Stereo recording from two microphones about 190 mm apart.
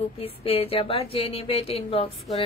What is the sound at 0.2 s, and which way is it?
A woman's voice, 30° left (ahead or behind).